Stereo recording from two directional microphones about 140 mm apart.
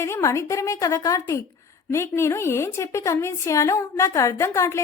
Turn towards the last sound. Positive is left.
turn(degrees=20)  # may be behind; listen again after turning